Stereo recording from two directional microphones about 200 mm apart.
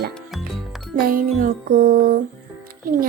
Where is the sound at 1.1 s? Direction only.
45° right (ahead or behind).